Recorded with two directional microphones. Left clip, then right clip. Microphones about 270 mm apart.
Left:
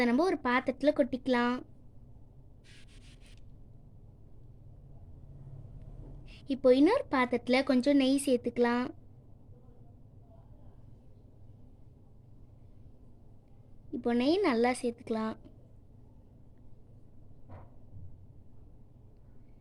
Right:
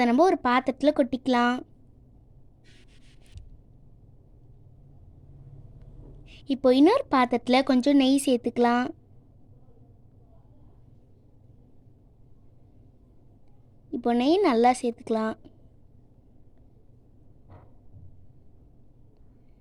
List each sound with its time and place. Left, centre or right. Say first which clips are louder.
0.0 s a woman's voice: right 8 dB; right
6.2 s a woman's voice: right 3 dB; right
13.9 s a woman's voice: right 6 dB; right